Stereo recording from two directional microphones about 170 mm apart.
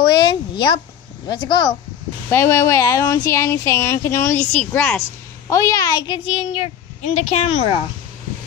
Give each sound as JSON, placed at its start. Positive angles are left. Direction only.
{"t": 0.0, "sound": "speech", "side_deg": 25}
{"t": 2.3, "sound": "a woman's voice", "side_deg": 15}